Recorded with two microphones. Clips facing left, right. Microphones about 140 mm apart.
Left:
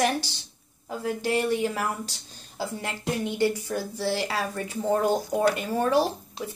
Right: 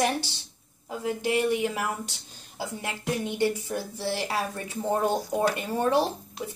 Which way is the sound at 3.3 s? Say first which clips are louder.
Left 2 dB; 20° right (ahead or behind).